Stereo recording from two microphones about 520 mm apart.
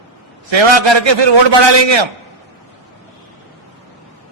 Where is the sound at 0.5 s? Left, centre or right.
Right.